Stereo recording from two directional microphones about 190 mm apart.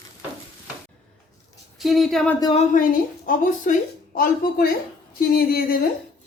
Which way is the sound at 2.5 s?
45° left (ahead or behind).